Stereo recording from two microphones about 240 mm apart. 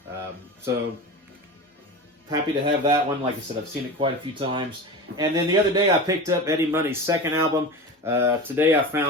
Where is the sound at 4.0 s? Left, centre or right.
Right.